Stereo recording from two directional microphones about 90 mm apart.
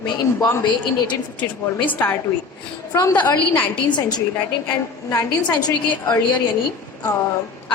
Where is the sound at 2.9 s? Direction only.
40° left (ahead or behind).